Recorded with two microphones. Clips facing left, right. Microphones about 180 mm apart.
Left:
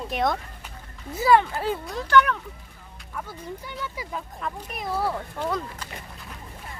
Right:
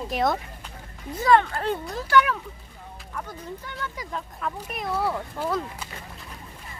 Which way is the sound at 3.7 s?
10° left (ahead or behind).